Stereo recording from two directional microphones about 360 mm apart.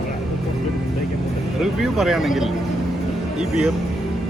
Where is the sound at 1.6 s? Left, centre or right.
Centre.